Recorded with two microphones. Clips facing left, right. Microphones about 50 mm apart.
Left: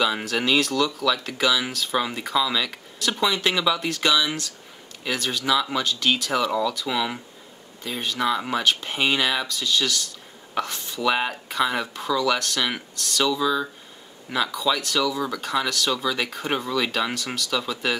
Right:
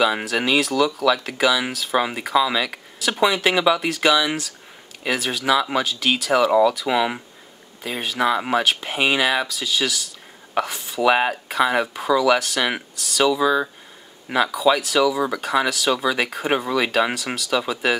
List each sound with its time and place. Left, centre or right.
0.2 s speech: centre
6.4 s speech: centre
8.6 s speech: centre
11.0 s speech: centre
13.2 s speech: centre
15.0 s speech: centre